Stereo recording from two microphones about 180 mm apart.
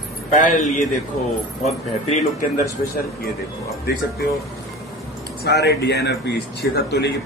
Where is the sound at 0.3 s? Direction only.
45° left (ahead or behind).